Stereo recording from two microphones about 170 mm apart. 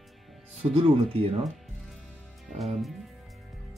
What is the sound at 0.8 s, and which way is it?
Speech, 35° right (ahead or behind).